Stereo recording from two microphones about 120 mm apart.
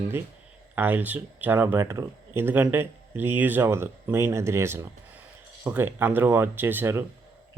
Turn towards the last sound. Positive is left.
turn(degrees=-20)  # may be behind; listen again after turning